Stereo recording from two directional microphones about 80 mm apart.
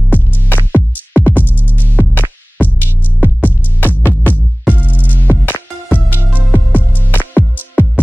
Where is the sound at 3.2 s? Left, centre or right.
Left.